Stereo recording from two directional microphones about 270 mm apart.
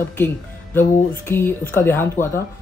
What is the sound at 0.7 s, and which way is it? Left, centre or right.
Speech, centre.